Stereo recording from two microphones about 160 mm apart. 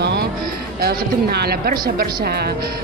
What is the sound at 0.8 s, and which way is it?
Speech, 75° right (ahead or behind).